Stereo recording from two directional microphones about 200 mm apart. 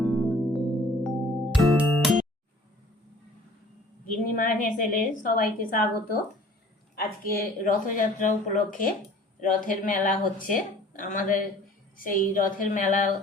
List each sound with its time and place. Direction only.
0.0 s music: centre (ahead or behind)
4.2 s a woman's voice: 45° left (ahead or behind)
7.3 s speech: 40° left (ahead or behind)